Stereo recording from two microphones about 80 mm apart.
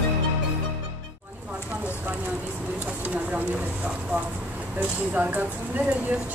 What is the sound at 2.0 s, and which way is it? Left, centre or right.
Vehicle, right.